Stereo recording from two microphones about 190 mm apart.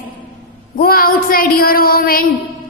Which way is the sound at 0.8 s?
50° left (ahead or behind).